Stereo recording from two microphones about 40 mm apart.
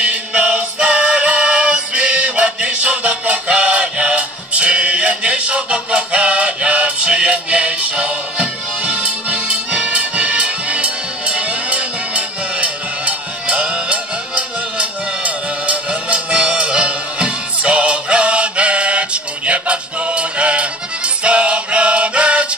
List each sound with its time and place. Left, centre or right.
0.0 s music: right